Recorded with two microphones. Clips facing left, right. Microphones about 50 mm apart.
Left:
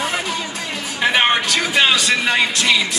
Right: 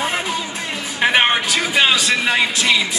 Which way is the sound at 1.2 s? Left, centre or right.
Centre.